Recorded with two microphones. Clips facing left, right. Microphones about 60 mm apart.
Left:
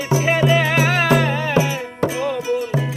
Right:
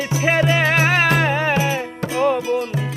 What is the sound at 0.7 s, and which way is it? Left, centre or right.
Music, right.